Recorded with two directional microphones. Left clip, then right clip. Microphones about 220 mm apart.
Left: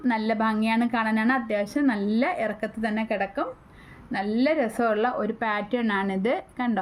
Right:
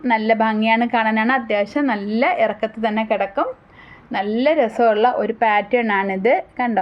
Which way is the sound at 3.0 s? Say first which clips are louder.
Right 8 dB; 35° right (ahead or behind).